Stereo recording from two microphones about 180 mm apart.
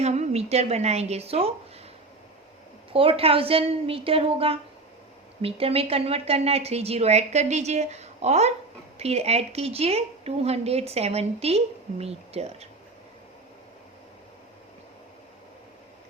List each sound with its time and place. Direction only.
0.0 s a woman's voice: 35° right (ahead or behind)
2.9 s a woman's voice: 30° right (ahead or behind)